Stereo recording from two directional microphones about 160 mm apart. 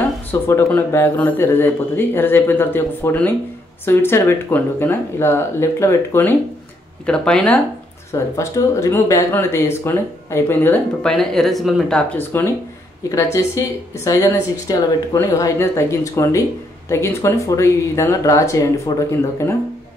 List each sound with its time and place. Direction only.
0.3 s speech: 15° left (ahead or behind)
8.1 s speech: 15° left (ahead or behind)